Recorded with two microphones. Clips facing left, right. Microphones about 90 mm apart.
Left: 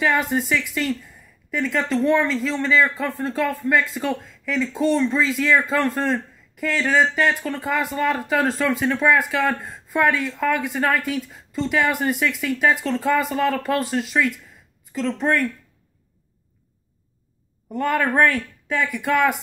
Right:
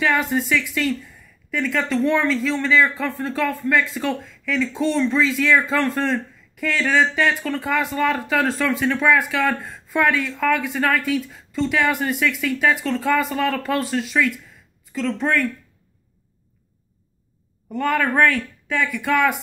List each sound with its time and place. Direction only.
0.0 s a man's voice: 20° left (ahead or behind)
1.7 s a man's voice: 15° left (ahead or behind)
17.7 s a man's voice: 25° left (ahead or behind)
18.9 s speech: 15° left (ahead or behind)